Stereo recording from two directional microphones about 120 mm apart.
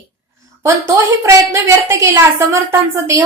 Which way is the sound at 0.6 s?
25° right (ahead or behind).